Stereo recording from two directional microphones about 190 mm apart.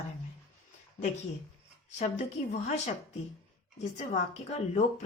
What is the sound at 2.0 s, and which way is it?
Speech, 35° left (ahead or behind).